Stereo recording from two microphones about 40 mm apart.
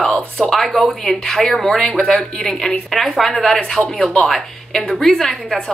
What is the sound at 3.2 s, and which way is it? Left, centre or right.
A woman's voice, centre.